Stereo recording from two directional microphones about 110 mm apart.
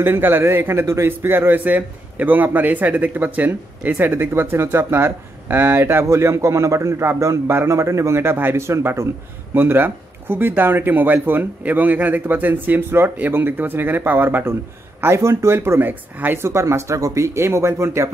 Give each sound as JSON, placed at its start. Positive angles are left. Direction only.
{"t": 0.0, "sound": "a man's voice", "side_deg": -20}